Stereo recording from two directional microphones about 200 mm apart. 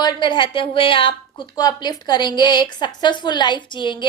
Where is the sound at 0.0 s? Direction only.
25° left (ahead or behind).